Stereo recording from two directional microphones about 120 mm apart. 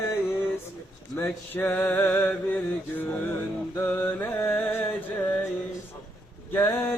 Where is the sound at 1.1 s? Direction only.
15° left (ahead or behind).